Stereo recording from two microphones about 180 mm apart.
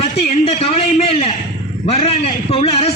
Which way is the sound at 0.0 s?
35° left (ahead or behind).